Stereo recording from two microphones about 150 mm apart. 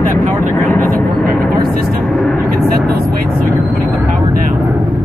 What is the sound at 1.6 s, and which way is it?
Music, 80° right.